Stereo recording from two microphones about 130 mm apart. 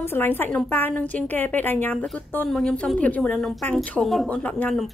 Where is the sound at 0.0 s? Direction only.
15° left (ahead or behind).